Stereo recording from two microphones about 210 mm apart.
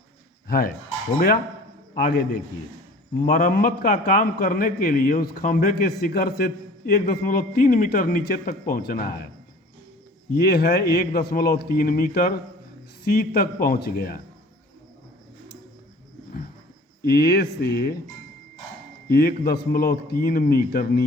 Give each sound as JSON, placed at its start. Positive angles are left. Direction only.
{"t": 0.4, "sound": "speech", "side_deg": 45}
{"t": 2.0, "sound": "a man's voice", "side_deg": 45}
{"t": 10.3, "sound": "a man's voice", "side_deg": 50}
{"t": 17.0, "sound": "a man's voice", "side_deg": 45}
{"t": 19.1, "sound": "a man's voice", "side_deg": 45}